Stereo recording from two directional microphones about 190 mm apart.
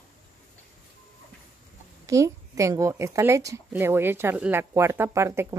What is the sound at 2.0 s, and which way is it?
A woman's voice, 15° right (ahead or behind).